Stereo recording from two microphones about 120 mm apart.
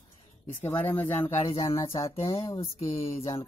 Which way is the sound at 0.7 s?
15° left (ahead or behind).